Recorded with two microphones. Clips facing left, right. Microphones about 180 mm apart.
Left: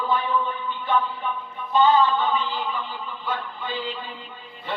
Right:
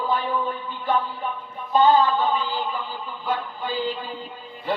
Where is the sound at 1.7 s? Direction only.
35° right (ahead or behind).